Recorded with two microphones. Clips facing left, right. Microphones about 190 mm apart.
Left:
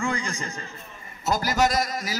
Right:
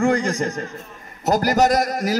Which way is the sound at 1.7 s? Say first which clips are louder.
Right 7 dB; 65° right (ahead or behind).